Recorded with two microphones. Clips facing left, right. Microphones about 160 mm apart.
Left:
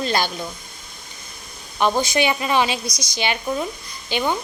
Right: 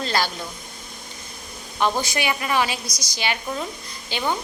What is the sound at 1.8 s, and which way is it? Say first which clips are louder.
A woman's voice: left 4 dB; 20° left (ahead or behind).